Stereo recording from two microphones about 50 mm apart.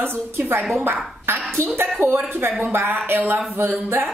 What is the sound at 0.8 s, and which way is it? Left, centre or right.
A woman's voice, right.